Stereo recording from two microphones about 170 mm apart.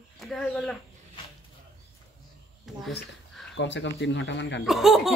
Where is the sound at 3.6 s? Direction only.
90° left.